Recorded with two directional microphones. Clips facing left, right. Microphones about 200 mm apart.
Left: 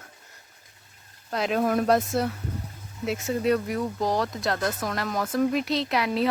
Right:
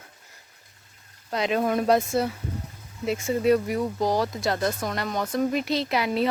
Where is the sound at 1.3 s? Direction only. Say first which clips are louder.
Even; centre (ahead or behind).